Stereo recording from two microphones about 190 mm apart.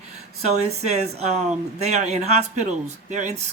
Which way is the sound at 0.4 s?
35° right (ahead or behind).